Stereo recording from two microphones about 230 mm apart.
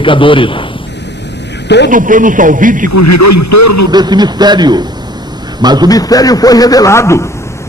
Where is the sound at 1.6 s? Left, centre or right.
Left.